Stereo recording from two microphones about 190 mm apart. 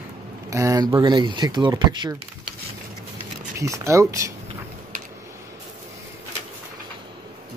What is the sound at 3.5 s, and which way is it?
Speech, 15° right (ahead or behind).